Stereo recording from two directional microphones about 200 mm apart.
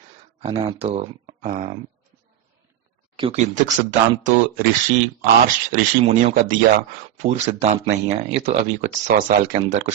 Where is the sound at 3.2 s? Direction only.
35° right (ahead or behind).